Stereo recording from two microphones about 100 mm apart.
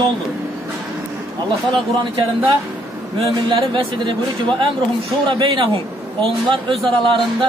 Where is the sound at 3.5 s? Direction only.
55° right (ahead or behind).